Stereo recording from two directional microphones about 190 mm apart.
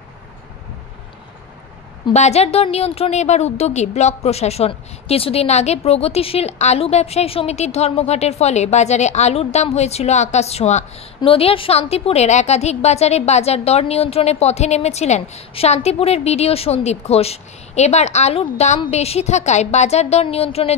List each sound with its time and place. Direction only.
2.1 s a woman's voice: 35° left (ahead or behind)